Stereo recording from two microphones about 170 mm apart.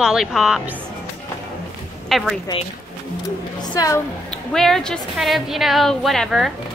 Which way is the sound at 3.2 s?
20° left (ahead or behind).